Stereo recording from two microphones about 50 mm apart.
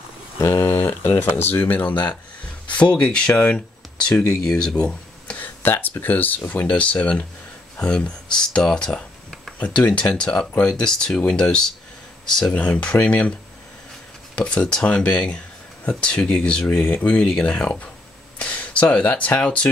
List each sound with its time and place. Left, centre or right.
0.5 s a sound: left
0.7 s speech: left; by 5.4 s centre
5.4 s speech: left
6.7 s speech: left
9.6 s speech: left; by 12.5 s centre
12.5 s speech: left
14.3 s speech: left
17.2 s speech: centre
18.4 s speech: left